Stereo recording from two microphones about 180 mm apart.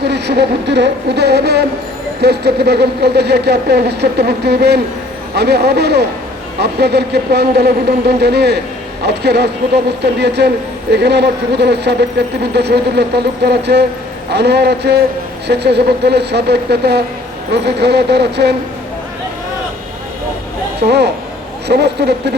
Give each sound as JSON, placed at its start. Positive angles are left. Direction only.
{"t": 0.0, "sound": "speech", "side_deg": -65}
{"t": 20.8, "sound": "speech", "side_deg": -65}